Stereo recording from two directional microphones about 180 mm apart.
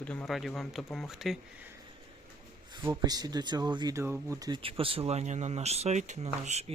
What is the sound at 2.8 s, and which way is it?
Speech, 20° right (ahead or behind).